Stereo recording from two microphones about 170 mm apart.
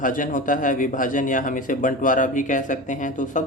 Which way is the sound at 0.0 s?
50° left (ahead or behind).